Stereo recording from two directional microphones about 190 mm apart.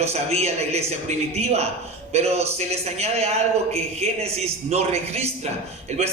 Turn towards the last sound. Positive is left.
turn(degrees=-35)  # may be behind; listen again after turning